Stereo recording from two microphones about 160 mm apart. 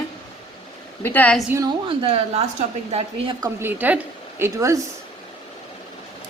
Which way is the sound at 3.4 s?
15° right (ahead or behind).